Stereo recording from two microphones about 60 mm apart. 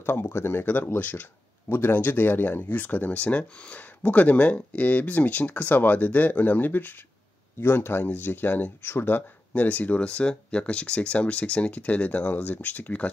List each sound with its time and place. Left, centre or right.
0.0 s speech: left
0.7 s speech: left